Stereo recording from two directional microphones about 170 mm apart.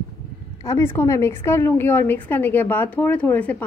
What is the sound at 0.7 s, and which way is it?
Speech, 15° left (ahead or behind).